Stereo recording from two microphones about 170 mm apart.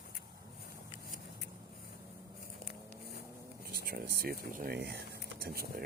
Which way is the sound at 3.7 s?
65° right (ahead or behind).